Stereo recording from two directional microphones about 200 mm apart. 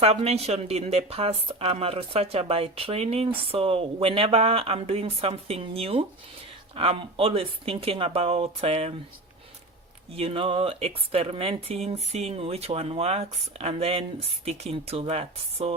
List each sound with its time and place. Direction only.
0.0 s speech: 30° right (ahead or behind)
10.2 s speech: 25° right (ahead or behind)